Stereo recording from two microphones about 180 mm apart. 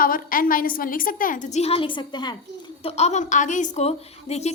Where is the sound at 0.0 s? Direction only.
50° left (ahead or behind); by 2.3 s 25° left (ahead or behind).